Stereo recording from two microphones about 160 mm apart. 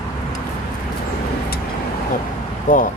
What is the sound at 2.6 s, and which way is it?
Speech, 55° left (ahead or behind).